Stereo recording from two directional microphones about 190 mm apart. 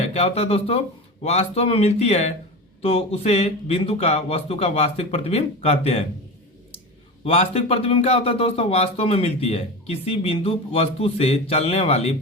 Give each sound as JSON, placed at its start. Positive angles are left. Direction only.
{"t": 0.0, "sound": "speech", "side_deg": 35}
{"t": 7.3, "sound": "speech", "side_deg": 30}